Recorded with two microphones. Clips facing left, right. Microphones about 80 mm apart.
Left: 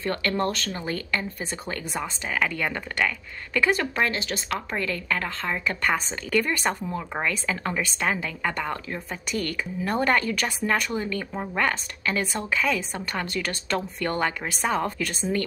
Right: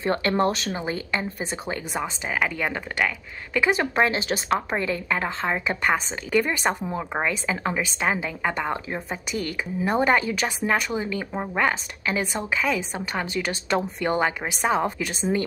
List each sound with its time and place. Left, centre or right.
0.0 s a woman's voice: right